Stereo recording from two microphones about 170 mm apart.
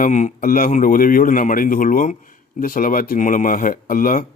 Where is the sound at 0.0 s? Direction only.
45° left (ahead or behind).